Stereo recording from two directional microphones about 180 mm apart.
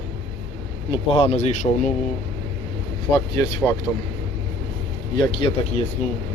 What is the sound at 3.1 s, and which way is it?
Speech, 20° left (ahead or behind).